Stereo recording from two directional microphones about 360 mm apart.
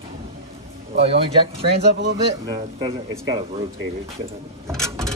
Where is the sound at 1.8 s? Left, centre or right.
Right.